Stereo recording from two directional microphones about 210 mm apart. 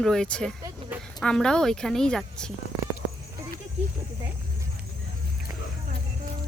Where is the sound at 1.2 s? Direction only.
5° left (ahead or behind).